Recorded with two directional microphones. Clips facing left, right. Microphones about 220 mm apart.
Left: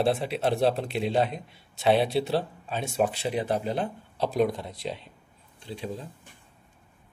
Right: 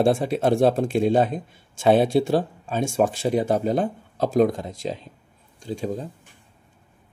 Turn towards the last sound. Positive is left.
turn(degrees=-45)  # may be behind; listen again after turning